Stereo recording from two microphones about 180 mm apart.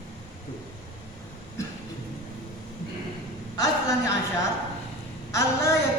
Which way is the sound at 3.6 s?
20° left (ahead or behind).